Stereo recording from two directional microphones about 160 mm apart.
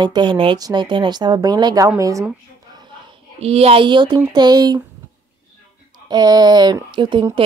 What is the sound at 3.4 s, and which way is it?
Speech, 40° right (ahead or behind).